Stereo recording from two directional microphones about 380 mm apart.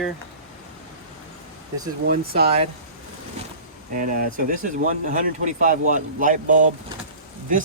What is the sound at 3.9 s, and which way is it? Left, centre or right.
Speech, right.